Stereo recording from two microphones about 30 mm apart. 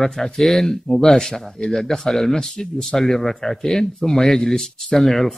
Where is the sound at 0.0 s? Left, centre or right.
Centre.